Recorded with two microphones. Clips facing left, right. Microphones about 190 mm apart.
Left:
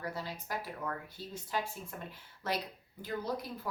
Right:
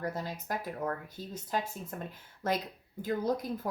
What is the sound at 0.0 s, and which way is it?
Speech, 45° right (ahead or behind).